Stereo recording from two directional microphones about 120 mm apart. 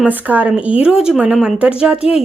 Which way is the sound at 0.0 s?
15° right (ahead or behind).